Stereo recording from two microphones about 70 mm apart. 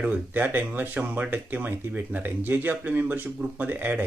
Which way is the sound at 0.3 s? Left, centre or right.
Right.